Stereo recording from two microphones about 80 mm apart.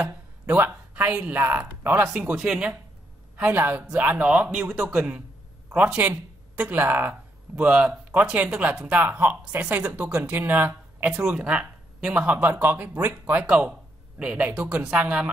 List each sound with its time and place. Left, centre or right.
0.0 s speech: right
2.0 s speech: centre